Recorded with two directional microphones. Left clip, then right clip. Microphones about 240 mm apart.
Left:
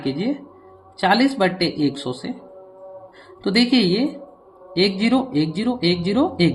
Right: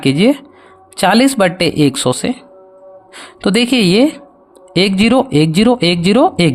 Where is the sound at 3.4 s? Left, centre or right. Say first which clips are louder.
Right 5 dB; right.